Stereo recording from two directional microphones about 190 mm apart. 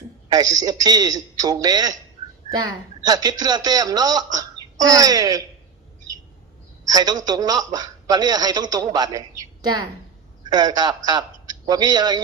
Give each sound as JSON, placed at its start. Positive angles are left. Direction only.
{"t": 0.3, "sound": "speech", "side_deg": -20}
{"t": 3.1, "sound": "speech", "side_deg": -20}
{"t": 6.9, "sound": "speech", "side_deg": -20}